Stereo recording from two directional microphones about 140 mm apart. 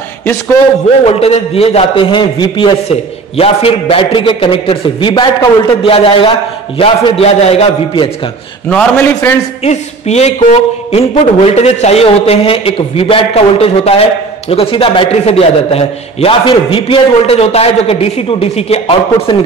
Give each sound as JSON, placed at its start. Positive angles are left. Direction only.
{"t": 1.0, "sound": "a man's voice", "side_deg": 45}
{"t": 8.6, "sound": "a man's voice", "side_deg": 10}
{"t": 9.6, "sound": "a man's voice", "side_deg": 50}